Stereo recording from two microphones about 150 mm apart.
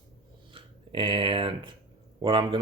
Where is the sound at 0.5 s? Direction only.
35° right (ahead or behind).